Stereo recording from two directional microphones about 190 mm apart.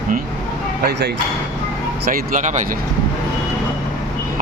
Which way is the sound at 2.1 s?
40° right (ahead or behind).